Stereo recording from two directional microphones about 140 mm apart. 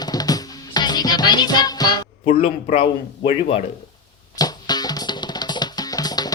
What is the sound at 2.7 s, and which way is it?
Speech, 40° left (ahead or behind).